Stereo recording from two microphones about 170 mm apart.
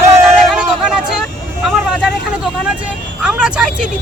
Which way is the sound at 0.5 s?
5° right (ahead or behind).